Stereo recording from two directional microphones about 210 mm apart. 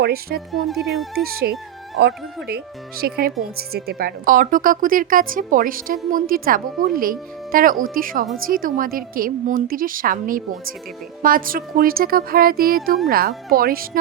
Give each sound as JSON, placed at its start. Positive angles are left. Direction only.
{"t": 0.0, "sound": "speech", "side_deg": -45}
{"t": 0.5, "sound": "speech", "side_deg": 0}
{"t": 1.1, "sound": "a woman's voice", "side_deg": -45}